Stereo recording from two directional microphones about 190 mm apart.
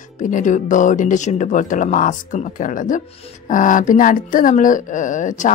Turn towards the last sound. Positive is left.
turn(degrees=40)  # may be behind; listen again after turning